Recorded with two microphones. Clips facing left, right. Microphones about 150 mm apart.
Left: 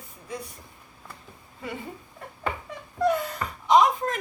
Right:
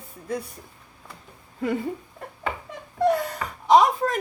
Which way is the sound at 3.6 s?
40° right (ahead or behind).